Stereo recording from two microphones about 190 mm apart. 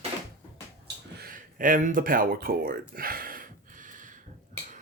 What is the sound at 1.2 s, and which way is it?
Speech, 45° right (ahead or behind).